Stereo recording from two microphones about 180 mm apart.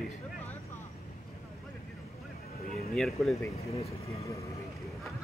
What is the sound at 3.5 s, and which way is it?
Speech, 35° left (ahead or behind).